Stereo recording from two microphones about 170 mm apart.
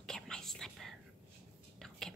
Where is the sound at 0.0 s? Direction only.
5° left (ahead or behind).